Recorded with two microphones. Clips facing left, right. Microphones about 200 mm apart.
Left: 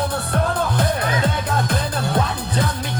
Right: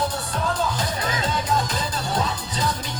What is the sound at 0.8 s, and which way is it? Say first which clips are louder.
Music: left 6 dB; 60° left (ahead or behind).